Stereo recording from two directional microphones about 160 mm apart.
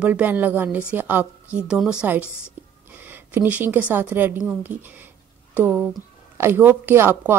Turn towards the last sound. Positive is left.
turn(degrees=-15)  # may be behind; listen again after turning